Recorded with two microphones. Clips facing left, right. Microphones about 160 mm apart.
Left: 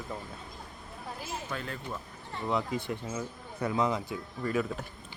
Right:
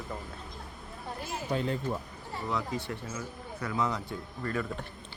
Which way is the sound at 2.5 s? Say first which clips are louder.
Left 3 dB; 20° left (ahead or behind).